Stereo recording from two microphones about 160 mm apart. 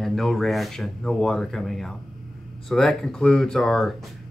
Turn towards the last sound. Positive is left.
turn(degrees=0)  # may be behind; listen again after turning